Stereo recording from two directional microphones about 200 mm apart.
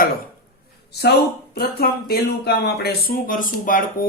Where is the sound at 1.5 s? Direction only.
50° left (ahead or behind).